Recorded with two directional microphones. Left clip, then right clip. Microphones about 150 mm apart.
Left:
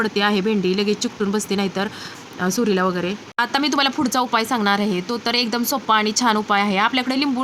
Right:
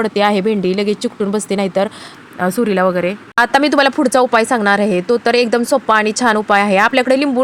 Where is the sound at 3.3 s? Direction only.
50° right (ahead or behind).